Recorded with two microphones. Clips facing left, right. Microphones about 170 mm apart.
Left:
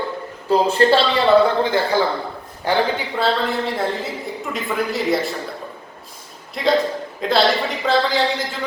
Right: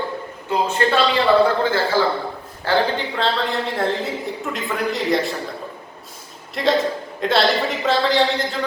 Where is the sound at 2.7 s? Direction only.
15° left (ahead or behind).